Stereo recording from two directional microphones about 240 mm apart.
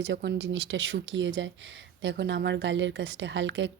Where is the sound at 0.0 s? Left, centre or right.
Right.